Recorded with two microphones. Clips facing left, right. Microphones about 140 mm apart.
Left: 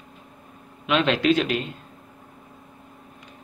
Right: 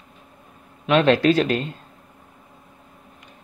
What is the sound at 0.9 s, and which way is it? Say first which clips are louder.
Speech: right 4 dB; 40° right (ahead or behind).